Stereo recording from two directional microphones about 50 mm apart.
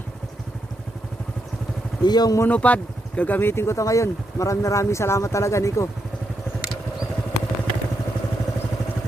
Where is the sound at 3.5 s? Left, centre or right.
Left.